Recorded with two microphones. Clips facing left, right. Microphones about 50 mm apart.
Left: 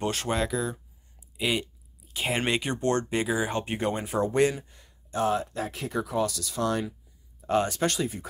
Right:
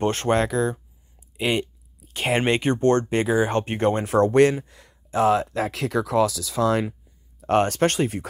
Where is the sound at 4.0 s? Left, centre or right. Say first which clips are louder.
Right 7 dB; right.